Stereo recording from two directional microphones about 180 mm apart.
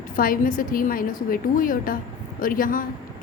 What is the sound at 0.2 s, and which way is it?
A woman's voice, 50° left (ahead or behind).